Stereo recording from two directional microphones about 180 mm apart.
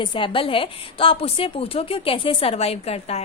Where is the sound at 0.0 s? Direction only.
25° left (ahead or behind).